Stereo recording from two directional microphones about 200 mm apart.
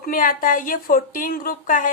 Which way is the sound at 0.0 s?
45° left (ahead or behind).